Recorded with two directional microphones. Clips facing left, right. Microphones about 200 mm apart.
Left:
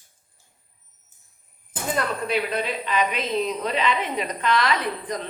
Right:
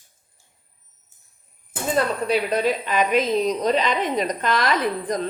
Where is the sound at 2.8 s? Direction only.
45° right (ahead or behind).